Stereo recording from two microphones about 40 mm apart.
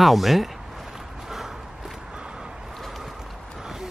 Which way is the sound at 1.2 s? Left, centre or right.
Centre.